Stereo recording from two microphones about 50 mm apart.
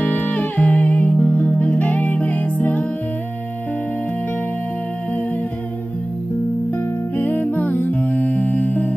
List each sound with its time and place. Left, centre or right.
0.0 s music: left
6.7 s music: left